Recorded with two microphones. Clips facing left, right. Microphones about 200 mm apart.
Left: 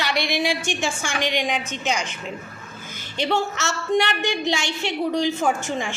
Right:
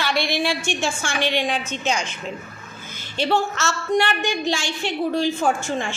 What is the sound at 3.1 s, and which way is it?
A woman's voice, 20° left (ahead or behind).